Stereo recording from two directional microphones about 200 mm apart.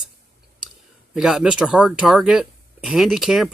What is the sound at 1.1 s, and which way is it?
Speech, 5° right (ahead or behind).